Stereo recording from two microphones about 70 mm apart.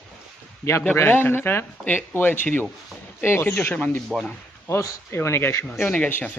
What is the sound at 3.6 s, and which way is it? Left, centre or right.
Speech, left.